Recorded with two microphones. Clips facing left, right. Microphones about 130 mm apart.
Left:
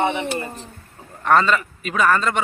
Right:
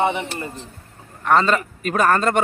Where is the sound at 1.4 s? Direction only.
40° right (ahead or behind).